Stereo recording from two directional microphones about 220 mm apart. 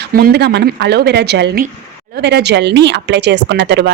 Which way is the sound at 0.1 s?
45° right (ahead or behind).